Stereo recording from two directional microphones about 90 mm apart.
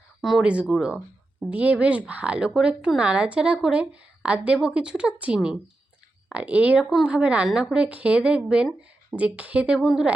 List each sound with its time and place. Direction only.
0.2 s speech: centre (ahead or behind)
0.4 s speech: 15° right (ahead or behind)